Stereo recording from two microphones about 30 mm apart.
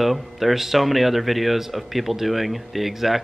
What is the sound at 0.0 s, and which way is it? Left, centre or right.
Speech, centre.